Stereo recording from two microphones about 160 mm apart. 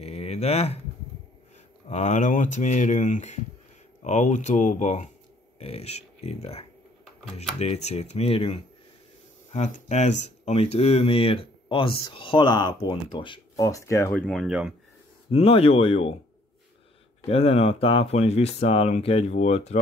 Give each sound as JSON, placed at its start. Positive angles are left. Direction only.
{"t": 0.0, "sound": "a sound", "side_deg": 40}
{"t": 1.9, "sound": "speech", "side_deg": 45}
{"t": 14.1, "sound": "speech", "side_deg": 5}
{"t": 15.3, "sound": "speech", "side_deg": 40}
{"t": 17.3, "sound": "speech", "side_deg": 35}